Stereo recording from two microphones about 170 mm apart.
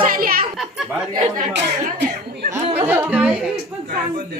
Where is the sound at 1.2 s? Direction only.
50° right (ahead or behind).